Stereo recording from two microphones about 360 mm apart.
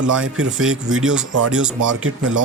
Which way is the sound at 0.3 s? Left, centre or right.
Centre.